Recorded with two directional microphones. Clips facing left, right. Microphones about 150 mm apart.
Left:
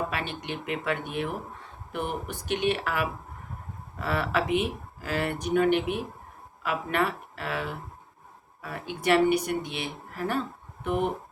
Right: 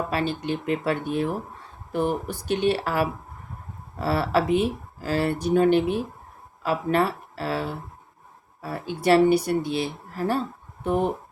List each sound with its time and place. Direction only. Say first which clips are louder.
0.1 s speech: right 7 dB; 35° right (ahead or behind)